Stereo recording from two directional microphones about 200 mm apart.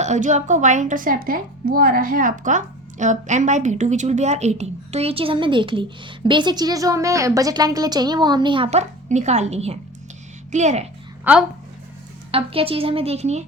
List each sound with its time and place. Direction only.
0.0 s a woman's voice: 35° right (ahead or behind)
11.3 s speech: 10° right (ahead or behind)
12.3 s a woman's voice: 30° right (ahead or behind)